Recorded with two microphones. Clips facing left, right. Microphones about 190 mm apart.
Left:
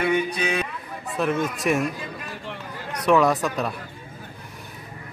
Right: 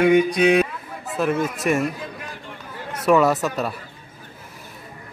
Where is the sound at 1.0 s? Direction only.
Centre (ahead or behind).